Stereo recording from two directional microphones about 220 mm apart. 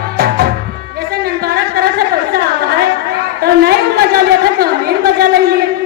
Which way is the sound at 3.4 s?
45° right (ahead or behind).